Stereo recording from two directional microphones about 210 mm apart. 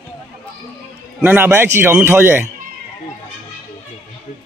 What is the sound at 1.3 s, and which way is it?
A man's voice, 10° right (ahead or behind).